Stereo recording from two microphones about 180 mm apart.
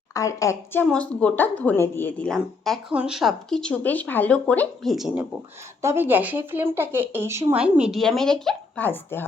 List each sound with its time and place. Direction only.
0.1 s a woman's voice: 20° left (ahead or behind); by 5.2 s centre (ahead or behind)
5.8 s speech: 15° right (ahead or behind); by 9.2 s 10° left (ahead or behind)